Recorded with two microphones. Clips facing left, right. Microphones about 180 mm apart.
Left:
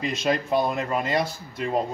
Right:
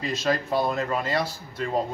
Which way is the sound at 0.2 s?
15° left (ahead or behind).